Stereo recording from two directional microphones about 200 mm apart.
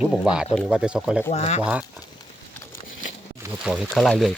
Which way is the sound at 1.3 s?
30° left (ahead or behind).